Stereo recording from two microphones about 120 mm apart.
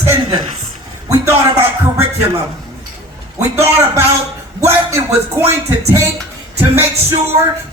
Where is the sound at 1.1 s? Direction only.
25° right (ahead or behind).